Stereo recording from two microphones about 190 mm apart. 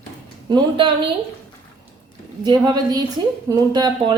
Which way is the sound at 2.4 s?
20° right (ahead or behind).